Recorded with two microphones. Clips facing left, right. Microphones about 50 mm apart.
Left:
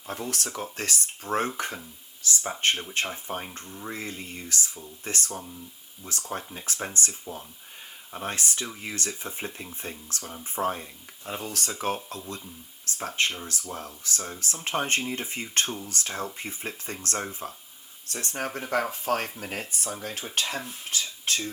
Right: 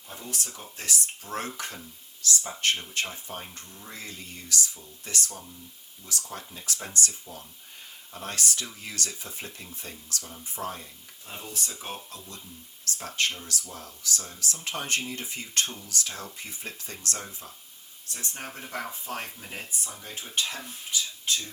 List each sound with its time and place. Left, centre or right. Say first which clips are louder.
0.1 s speech: left 6 dB; left
1.2 s speech: left 6 dB; left
5.3 s speech: left 6 dB; left
6.1 s speech: left 4 dB; left
11.4 s speech: right 1 dB; left
11.7 s speech: left 9 dB; left
12.0 s speech: left 7 dB; left
12.8 s speech: left 2 dB; left
18.1 s speech: left 7 dB; left
18.7 s speech: left 9 dB; left
19.7 s speech: left 5 dB; left